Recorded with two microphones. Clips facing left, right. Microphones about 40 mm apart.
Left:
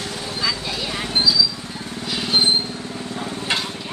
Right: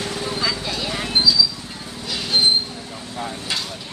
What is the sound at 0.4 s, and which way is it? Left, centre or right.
Vehicle, centre.